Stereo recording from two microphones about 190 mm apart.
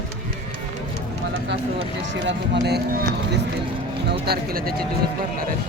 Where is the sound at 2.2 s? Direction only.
60° right (ahead or behind).